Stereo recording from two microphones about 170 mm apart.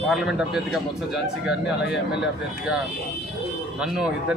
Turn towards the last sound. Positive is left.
turn(degrees=-5)  # may be behind; listen again after turning